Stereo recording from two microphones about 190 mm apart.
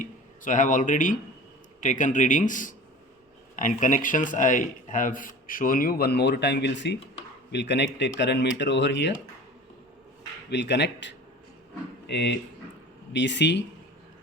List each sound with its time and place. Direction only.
0.0 s a sound: 45° left (ahead or behind)
1.8 s a man's voice: 40° left (ahead or behind); by 9.1 s 65° left (ahead or behind)
10.5 s speech: 65° left (ahead or behind)